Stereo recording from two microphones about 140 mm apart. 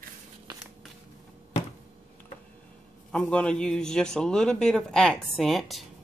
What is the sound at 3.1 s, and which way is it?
A man's voice, 5° left (ahead or behind).